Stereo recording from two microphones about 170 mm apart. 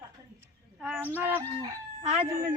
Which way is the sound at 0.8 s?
10° right (ahead or behind).